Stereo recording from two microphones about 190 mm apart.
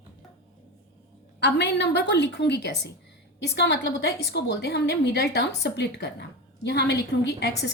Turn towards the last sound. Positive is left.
turn(degrees=60)  # may be behind; listen again after turning